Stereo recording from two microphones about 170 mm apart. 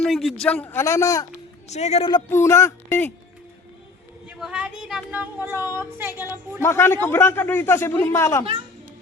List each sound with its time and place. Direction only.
0.0 s a man's voice: centre (ahead or behind); by 1.3 s 20° left (ahead or behind)
1.7 s a man's voice: 40° left (ahead or behind)
2.3 s a man's voice: 15° left (ahead or behind)
4.3 s speech: 5° right (ahead or behind)
6.6 s a man's voice: 15° left (ahead or behind)